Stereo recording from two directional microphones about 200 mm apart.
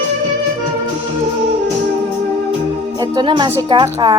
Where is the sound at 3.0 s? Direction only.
20° right (ahead or behind).